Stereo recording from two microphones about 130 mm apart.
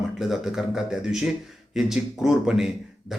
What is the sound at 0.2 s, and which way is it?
Speech, centre (ahead or behind).